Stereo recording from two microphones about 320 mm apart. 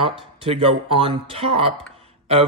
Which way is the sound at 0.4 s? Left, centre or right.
Centre.